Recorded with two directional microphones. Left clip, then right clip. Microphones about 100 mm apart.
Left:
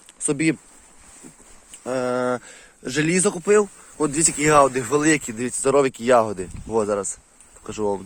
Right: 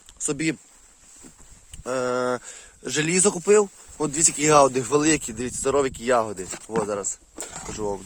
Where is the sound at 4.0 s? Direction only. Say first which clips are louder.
Left 2 dB; 20° right (ahead or behind).